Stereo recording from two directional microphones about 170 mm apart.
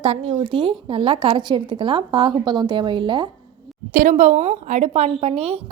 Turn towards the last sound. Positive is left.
turn(degrees=-35)  # may be behind; listen again after turning